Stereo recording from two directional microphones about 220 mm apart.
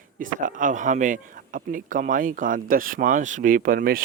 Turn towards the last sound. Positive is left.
turn(degrees=-40)  # may be behind; listen again after turning